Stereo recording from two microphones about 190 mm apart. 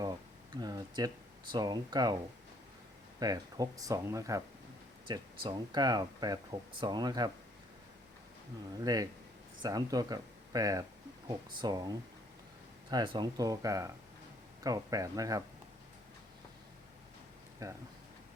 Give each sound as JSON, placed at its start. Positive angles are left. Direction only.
{"t": 0.6, "sound": "speech", "side_deg": -20}
{"t": 3.2, "sound": "speech", "side_deg": -20}
{"t": 8.8, "sound": "speech", "side_deg": -20}
{"t": 17.6, "sound": "speech", "side_deg": -20}